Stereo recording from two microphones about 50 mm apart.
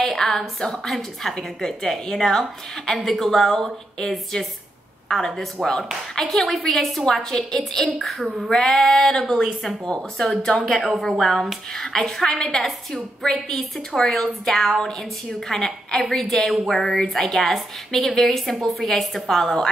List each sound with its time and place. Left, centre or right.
0.0 s a woman's voice: centre
10.3 s speech: left
10.7 s a woman's voice: centre